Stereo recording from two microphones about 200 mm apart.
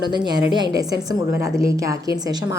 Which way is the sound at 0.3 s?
20° right (ahead or behind).